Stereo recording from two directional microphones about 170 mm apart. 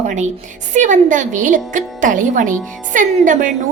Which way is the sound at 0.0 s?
45° right (ahead or behind).